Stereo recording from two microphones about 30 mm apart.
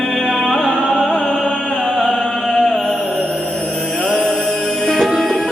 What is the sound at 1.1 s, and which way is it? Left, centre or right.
Music, left.